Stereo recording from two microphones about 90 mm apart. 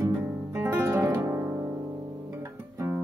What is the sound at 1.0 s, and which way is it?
Music, 35° right (ahead or behind).